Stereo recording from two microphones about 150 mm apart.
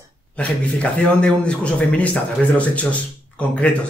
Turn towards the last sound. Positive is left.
turn(degrees=10)  # may be behind; listen again after turning